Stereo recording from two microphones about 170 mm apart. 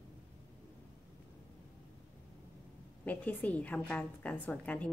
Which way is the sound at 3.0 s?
10° left (ahead or behind).